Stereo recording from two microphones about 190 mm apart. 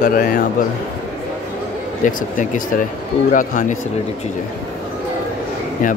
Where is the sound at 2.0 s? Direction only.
40° left (ahead or behind).